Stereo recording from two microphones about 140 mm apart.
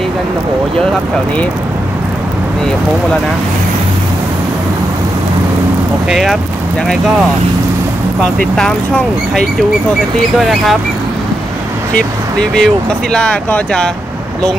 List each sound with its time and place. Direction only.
6.0 s speech: centre (ahead or behind)
8.2 s speech: 5° left (ahead or behind)
11.9 s speech: 5° left (ahead or behind)